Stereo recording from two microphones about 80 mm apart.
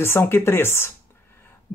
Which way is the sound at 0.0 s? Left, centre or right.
Left.